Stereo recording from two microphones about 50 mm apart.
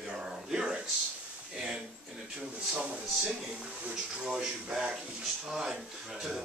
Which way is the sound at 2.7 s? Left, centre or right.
Right.